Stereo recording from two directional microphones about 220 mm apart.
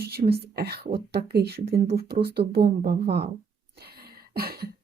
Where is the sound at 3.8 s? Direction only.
45° right (ahead or behind).